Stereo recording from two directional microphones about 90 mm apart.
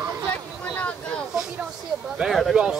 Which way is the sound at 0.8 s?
15° left (ahead or behind).